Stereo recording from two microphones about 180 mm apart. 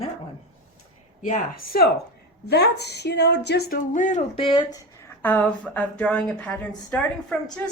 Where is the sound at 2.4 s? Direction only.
65° left (ahead or behind).